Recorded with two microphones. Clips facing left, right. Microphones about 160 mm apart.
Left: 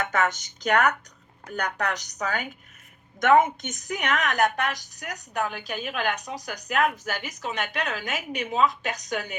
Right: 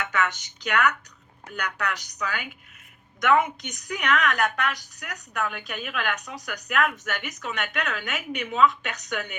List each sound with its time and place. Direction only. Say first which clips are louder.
0.0 s a woman's voice: left 2 dB; 45° left (ahead or behind)